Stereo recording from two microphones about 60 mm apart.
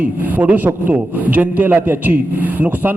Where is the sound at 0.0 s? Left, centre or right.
Right.